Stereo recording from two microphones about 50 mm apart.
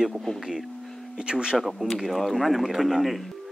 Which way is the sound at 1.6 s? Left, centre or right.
Centre.